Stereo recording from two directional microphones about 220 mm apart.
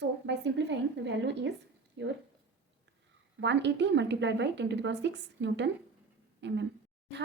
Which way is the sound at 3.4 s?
55° right (ahead or behind).